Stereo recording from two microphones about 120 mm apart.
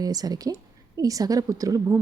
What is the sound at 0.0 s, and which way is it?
A woman's voice, 30° right (ahead or behind).